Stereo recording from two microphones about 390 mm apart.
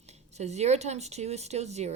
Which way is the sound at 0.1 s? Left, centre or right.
Centre.